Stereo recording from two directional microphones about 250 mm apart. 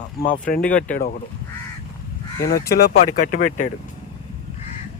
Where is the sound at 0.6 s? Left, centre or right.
Centre.